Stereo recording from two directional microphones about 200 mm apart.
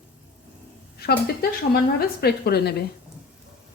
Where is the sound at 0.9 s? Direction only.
50° left (ahead or behind).